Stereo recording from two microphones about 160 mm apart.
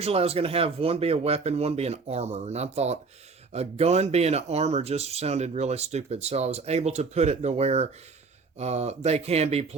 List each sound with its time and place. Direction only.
0.0 s speech: 40° right (ahead or behind)